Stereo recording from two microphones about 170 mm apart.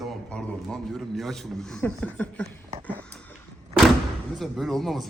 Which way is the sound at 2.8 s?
10° left (ahead or behind).